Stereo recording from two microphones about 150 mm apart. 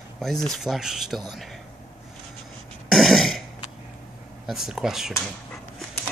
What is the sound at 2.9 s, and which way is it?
Throat clearing, centre (ahead or behind).